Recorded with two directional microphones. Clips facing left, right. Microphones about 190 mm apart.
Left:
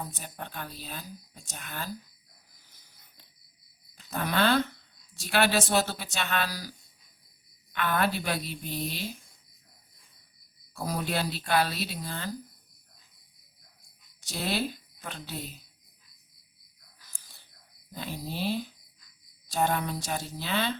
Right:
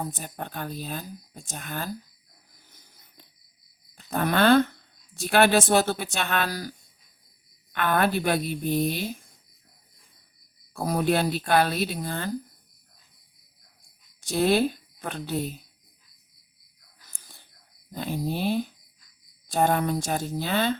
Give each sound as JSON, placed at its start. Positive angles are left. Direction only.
{"t": 0.0, "sound": "speech", "side_deg": -50}
{"t": 3.9, "sound": "speech", "side_deg": -50}
{"t": 10.8, "sound": "speech", "side_deg": -55}
{"t": 14.2, "sound": "a woman's voice", "side_deg": -55}
{"t": 17.9, "sound": "speech", "side_deg": -50}